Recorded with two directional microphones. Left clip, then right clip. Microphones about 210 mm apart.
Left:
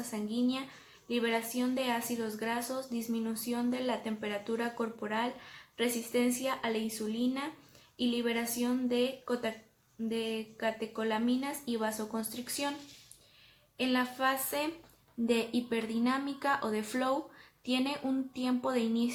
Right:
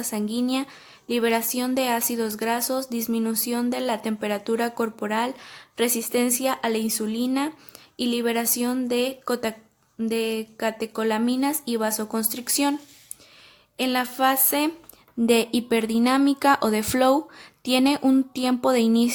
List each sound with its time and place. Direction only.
0.1 s speech: 55° right (ahead or behind)
13.7 s speech: 50° right (ahead or behind)